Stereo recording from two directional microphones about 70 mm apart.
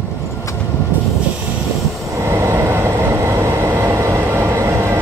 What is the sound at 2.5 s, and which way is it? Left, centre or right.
Vehicle, right.